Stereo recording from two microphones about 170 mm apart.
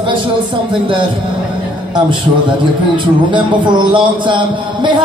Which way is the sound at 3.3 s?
25° right (ahead or behind).